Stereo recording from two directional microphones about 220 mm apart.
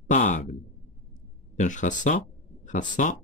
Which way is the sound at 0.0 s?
35° left (ahead or behind).